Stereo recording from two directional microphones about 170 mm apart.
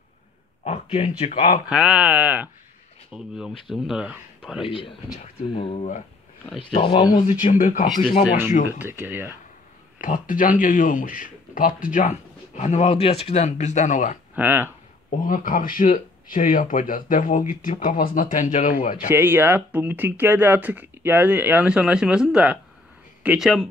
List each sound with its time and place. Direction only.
0.7 s speech: 40° left (ahead or behind)
1.7 s speech: 5° right (ahead or behind)
4.6 s speech: 30° left (ahead or behind)
6.7 s speech: 30° left (ahead or behind)
7.5 s speech: 50° left (ahead or behind)
8.6 s speech: 10° right (ahead or behind)
9.9 s speech: 50° left (ahead or behind)
14.3 s speech: 10° right (ahead or behind)
15.0 s speech: 50° left (ahead or behind)
19.0 s speech: 10° right (ahead or behind)